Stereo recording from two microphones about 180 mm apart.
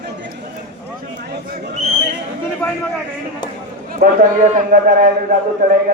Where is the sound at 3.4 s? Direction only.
25° left (ahead or behind).